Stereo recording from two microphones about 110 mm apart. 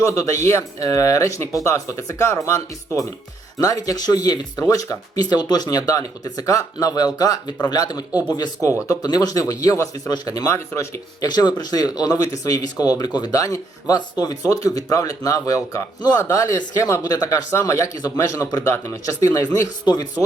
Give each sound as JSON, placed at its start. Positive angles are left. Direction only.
{"t": 0.0, "sound": "speech", "side_deg": 30}